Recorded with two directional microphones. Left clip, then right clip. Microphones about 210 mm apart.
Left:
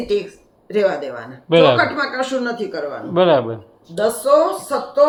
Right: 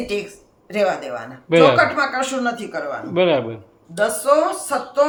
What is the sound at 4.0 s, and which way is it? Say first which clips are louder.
A woman's voice: left 2 dB; 45° right (ahead or behind).